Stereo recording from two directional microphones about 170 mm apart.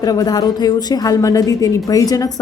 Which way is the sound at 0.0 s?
20° left (ahead or behind).